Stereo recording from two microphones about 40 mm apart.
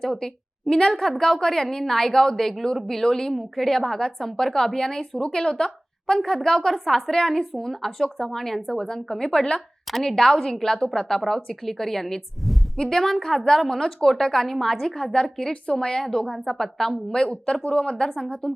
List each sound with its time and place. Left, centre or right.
0.0 s a woman's voice: centre
3.7 s a woman's voice: centre
17.1 s speech: left
17.5 s a woman's voice: centre